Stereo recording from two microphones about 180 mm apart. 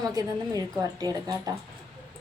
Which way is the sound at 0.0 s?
20° right (ahead or behind).